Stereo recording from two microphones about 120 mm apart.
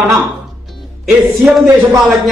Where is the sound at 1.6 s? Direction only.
15° right (ahead or behind).